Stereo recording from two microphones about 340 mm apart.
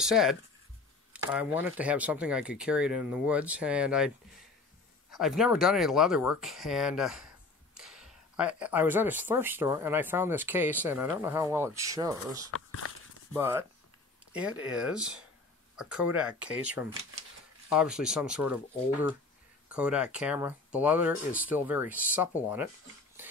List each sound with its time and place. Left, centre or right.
0.0 s speech: centre
5.1 s speech: centre
12.4 s speech: left
13.3 s speech: centre